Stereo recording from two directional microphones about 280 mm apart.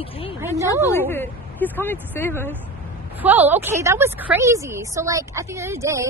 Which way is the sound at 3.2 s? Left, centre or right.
Centre.